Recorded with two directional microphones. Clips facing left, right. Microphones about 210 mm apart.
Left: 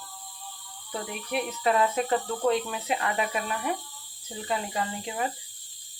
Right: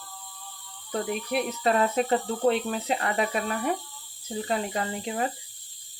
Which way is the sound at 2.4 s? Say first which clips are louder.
Right 2 dB; 35° right (ahead or behind).